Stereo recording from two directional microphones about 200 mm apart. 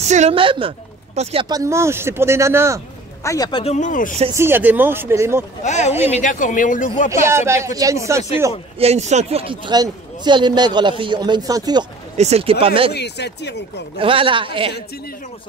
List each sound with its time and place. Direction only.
0.0 s a woman's voice: 35° right (ahead or behind); by 2.8 s 15° right (ahead or behind)
3.3 s a man's voice: 20° left (ahead or behind)
3.7 s speech: 40° left (ahead or behind)
4.3 s a woman's voice: 10° right (ahead or behind)
5.6 s speech: 35° left (ahead or behind)
7.2 s a woman's voice: 15° right (ahead or behind)
8.7 s speech: 30° right (ahead or behind)
12.2 s speech: 30° right (ahead or behind)
12.9 s speech: 55° left (ahead or behind)
13.9 s speech: 25° right (ahead or behind)